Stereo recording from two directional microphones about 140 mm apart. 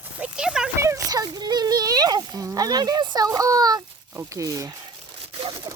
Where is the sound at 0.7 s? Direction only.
20° right (ahead or behind).